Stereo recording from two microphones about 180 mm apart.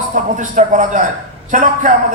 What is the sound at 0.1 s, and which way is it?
A man's voice, 45° right (ahead or behind).